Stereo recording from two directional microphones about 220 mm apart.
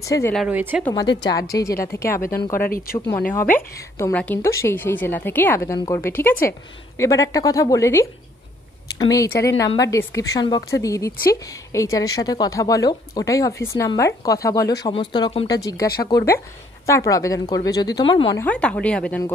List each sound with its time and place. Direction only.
0.0 s a woman's voice: 15° left (ahead or behind)
0.5 s speech: 10° right (ahead or behind)
1.2 s a woman's voice: 15° left (ahead or behind)
2.6 s speech: 40° left (ahead or behind)
3.5 s a woman's voice: 5° left (ahead or behind)